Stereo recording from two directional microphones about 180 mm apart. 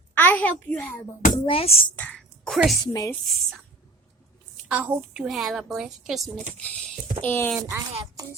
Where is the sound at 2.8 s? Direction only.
20° left (ahead or behind).